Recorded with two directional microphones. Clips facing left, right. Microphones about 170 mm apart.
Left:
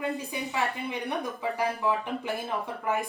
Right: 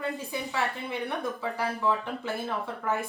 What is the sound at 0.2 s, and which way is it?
A woman's voice, 15° left (ahead or behind).